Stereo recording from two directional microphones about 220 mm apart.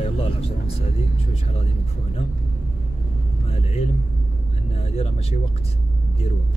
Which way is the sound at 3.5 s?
30° left (ahead or behind).